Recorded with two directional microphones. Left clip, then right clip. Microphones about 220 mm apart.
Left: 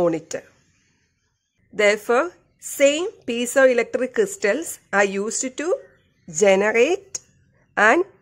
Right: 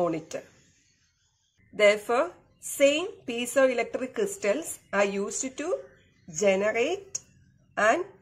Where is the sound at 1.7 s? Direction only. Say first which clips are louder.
Left 4 dB; 45° left (ahead or behind).